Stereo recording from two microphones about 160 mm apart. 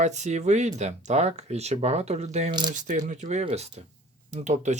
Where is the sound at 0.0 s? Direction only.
45° right (ahead or behind).